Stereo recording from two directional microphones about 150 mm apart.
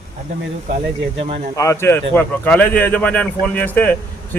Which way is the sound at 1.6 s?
20° left (ahead or behind).